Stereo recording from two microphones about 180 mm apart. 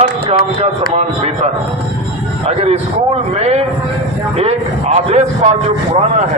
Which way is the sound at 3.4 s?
35° right (ahead or behind).